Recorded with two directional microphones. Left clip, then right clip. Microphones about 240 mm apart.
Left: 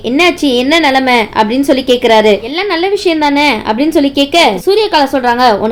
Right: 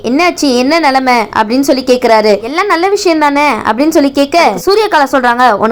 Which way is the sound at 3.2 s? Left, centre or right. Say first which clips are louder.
Right 1 dB; centre.